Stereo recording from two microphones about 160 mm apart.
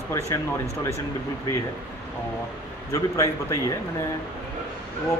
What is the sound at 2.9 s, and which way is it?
Speech, 20° left (ahead or behind).